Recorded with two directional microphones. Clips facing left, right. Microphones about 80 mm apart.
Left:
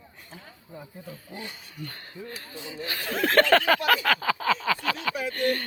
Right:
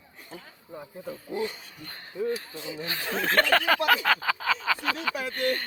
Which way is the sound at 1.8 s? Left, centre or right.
Centre.